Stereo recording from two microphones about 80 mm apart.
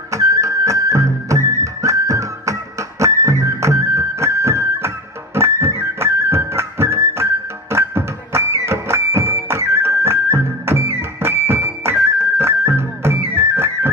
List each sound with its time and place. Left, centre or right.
0.1 s music: right